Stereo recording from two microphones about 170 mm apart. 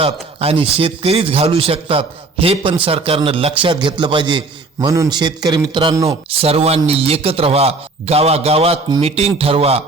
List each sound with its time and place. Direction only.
0.0 s a man's voice: 35° right (ahead or behind)
6.1 s a man's voice: 35° right (ahead or behind)